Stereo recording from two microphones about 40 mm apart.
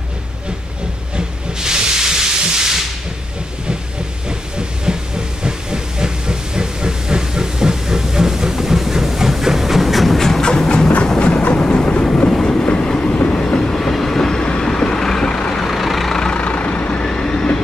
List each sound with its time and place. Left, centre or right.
1.1 s steam: centre
4.3 s hiss: centre
11.1 s train: left
13.7 s train: centre
14.6 s vehicle: centre
15.5 s vehicle: centre
16.2 s vehicle: left
16.4 s vehicle: left
17.0 s train: left